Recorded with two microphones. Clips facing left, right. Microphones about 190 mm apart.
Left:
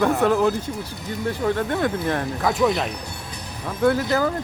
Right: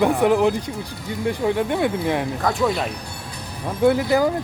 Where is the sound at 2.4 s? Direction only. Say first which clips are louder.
Left 1 dB; centre (ahead or behind).